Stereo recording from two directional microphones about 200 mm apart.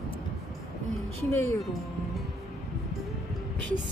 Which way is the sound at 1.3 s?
15° left (ahead or behind).